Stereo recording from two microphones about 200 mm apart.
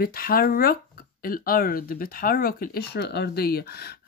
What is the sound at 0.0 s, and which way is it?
Speech, 50° left (ahead or behind).